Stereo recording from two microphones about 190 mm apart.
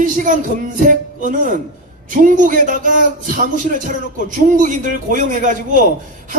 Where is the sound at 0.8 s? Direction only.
45° right (ahead or behind).